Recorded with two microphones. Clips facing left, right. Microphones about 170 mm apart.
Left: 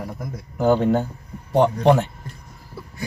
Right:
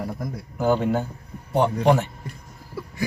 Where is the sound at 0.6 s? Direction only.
20° left (ahead or behind).